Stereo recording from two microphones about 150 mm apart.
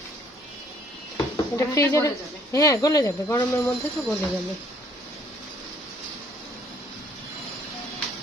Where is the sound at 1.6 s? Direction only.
20° left (ahead or behind).